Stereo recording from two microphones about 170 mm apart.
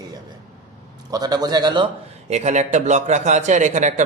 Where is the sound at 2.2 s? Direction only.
40° right (ahead or behind).